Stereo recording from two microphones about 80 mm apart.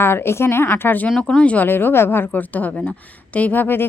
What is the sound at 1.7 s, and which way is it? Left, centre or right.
A woman's voice, left.